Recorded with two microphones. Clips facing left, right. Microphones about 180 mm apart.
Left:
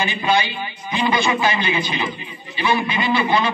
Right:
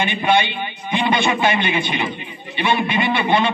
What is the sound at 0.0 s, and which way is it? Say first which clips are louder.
A man's voice: right 2 dB; 25° right (ahead or behind).